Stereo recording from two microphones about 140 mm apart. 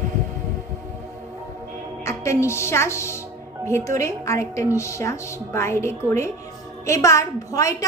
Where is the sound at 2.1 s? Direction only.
20° left (ahead or behind).